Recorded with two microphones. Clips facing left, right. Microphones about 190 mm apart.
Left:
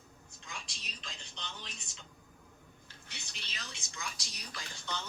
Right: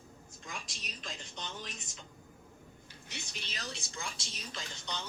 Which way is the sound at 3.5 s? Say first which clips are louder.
Right 5 dB; 30° right (ahead or behind).